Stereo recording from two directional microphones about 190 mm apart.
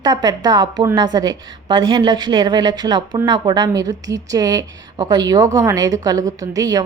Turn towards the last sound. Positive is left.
turn(degrees=-20)  # may be behind; listen again after turning